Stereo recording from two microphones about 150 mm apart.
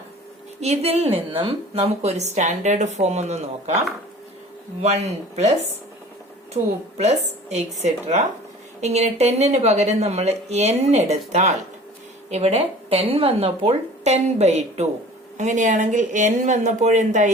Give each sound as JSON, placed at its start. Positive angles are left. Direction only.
{"t": 0.6, "sound": "a woman's voice", "side_deg": -45}
{"t": 4.8, "sound": "a woman's voice", "side_deg": -50}
{"t": 6.5, "sound": "a woman's voice", "side_deg": -45}